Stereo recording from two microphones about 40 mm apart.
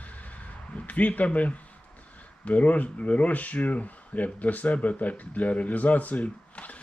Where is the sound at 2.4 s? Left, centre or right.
Left.